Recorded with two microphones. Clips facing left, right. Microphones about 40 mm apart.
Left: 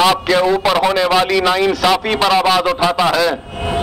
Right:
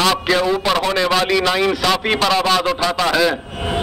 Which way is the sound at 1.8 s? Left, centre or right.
Centre.